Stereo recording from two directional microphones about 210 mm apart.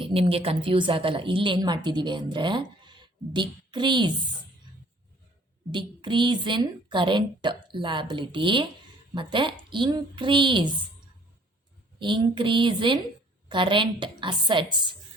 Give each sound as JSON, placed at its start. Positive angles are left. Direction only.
{"t": 0.0, "sound": "a woman's voice", "side_deg": -25}
{"t": 5.7, "sound": "a woman's voice", "side_deg": -20}
{"t": 11.9, "sound": "a woman's voice", "side_deg": -20}